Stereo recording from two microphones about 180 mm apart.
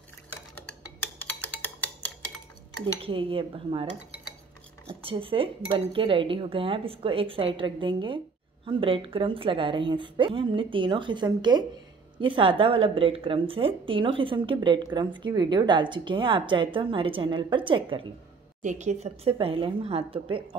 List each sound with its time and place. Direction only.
0.7 s music: 10° left (ahead or behind)
3.0 s speech: 30° right (ahead or behind)
4.8 s speech: 30° right (ahead or behind)
18.6 s a woman's voice: 40° right (ahead or behind)